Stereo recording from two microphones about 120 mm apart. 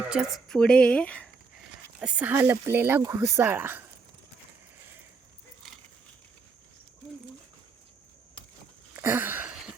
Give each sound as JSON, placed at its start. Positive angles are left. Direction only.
{"t": 0.0, "sound": "speech", "side_deg": -5}
{"t": 2.0, "sound": "speech", "side_deg": -10}
{"t": 8.9, "sound": "a sound", "side_deg": -20}